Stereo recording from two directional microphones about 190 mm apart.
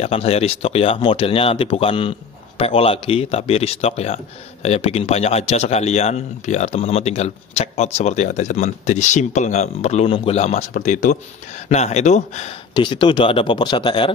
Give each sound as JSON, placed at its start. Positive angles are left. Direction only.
{"t": 0.0, "sound": "speech", "side_deg": 35}
{"t": 12.7, "sound": "speech", "side_deg": 25}